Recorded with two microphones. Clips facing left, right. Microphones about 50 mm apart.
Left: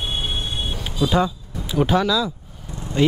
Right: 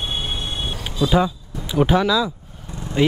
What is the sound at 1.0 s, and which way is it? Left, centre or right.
Speech, centre.